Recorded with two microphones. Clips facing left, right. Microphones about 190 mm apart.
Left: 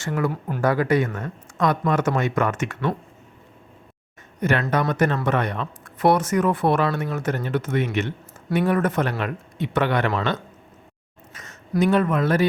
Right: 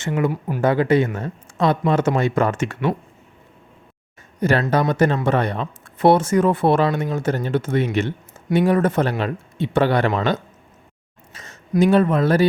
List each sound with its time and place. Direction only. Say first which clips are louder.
0.0 s speech: right 3 dB; 20° right (ahead or behind)
0.6 s speech: right 3 dB; 25° right (ahead or behind)
4.4 s speech: right 3 dB; 35° right (ahead or behind)